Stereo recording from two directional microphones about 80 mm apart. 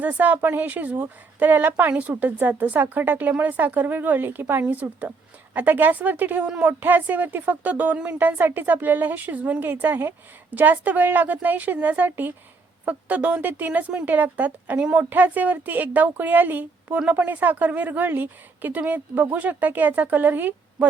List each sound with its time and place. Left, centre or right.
0.0 s speech: centre